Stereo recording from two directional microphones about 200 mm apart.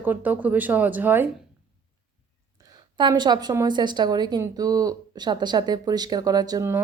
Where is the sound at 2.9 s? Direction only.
20° right (ahead or behind).